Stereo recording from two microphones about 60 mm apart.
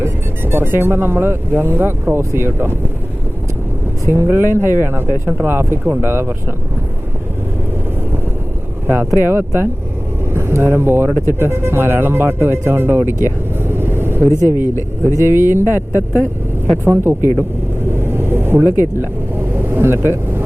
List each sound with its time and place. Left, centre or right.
0.0 s speech: right
4.0 s speech: right
9.0 s speech: right
17.9 s vehicle: right